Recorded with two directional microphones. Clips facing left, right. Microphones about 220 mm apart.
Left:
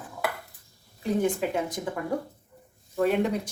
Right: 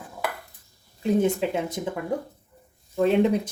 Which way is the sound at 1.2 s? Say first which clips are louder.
Right 2 dB; 25° right (ahead or behind).